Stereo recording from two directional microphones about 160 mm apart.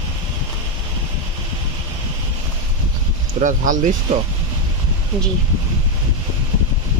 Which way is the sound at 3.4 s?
55° right (ahead or behind).